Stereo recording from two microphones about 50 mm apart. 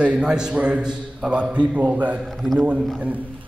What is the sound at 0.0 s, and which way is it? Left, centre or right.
A man's voice, centre.